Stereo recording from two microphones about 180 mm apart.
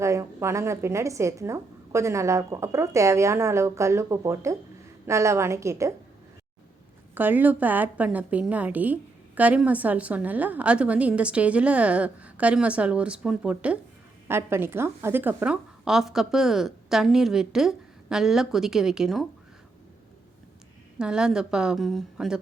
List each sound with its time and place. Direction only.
0.0 s a woman's voice: 15° right (ahead or behind)
7.1 s a woman's voice: 10° right (ahead or behind)
21.0 s a woman's voice: 5° right (ahead or behind)